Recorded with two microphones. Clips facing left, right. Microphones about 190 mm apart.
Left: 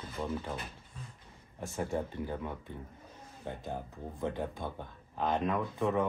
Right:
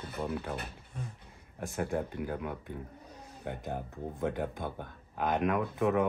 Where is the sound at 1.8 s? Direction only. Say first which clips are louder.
Right 1 dB; 10° right (ahead or behind).